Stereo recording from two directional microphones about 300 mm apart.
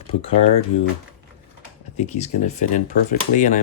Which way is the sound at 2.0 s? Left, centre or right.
Left.